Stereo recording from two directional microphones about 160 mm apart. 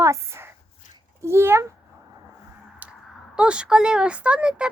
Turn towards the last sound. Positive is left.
turn(degrees=-5)  # may be behind; listen again after turning